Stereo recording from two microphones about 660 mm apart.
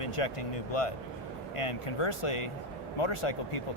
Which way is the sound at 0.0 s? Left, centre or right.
Left.